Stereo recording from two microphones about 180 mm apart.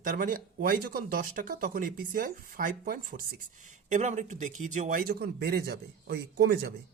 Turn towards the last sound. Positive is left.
turn(degrees=-60)  # may be behind; listen again after turning